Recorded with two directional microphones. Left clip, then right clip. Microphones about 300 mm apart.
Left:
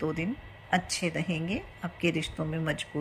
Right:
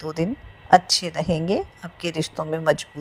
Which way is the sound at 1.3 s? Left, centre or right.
Right.